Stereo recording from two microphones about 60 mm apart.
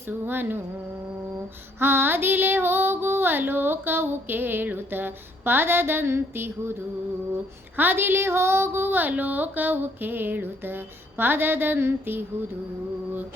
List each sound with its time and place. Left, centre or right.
0.1 s female singing: right
1.8 s female singing: right